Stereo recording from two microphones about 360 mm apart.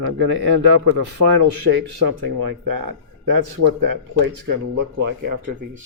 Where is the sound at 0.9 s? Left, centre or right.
Right.